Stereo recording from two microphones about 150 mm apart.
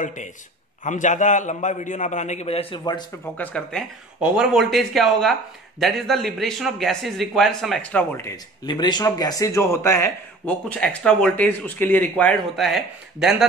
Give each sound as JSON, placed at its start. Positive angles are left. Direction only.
{"t": 0.0, "sound": "a man's voice", "side_deg": 55}
{"t": 3.3, "sound": "speech", "side_deg": 5}
{"t": 4.2, "sound": "a man's voice", "side_deg": -5}
{"t": 8.6, "sound": "speech", "side_deg": 30}